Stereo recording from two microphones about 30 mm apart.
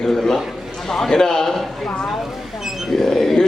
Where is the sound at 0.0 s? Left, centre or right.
Centre.